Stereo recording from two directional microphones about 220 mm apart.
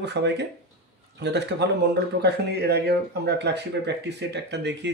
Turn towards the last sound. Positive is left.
turn(degrees=-50)  # may be behind; listen again after turning